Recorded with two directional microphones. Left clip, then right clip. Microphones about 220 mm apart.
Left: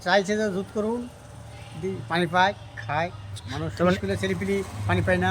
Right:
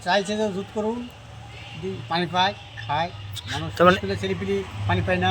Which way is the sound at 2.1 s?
5° left (ahead or behind).